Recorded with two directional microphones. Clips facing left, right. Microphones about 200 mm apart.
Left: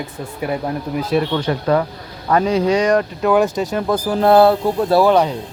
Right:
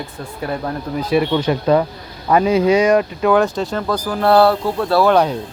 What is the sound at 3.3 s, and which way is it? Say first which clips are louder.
Speech: left 1 dB; 5° left (ahead or behind).